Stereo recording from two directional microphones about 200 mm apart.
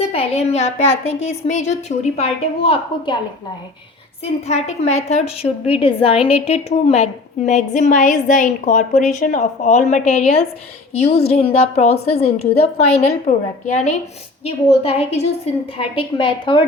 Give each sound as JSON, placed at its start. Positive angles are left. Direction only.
{"t": 0.1, "sound": "a woman's voice", "side_deg": 30}
{"t": 4.4, "sound": "a woman's voice", "side_deg": 35}
{"t": 14.4, "sound": "a woman's voice", "side_deg": 30}